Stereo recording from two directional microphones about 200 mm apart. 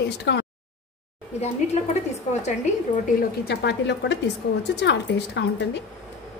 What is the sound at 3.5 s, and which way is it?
A woman's voice, 60° left (ahead or behind).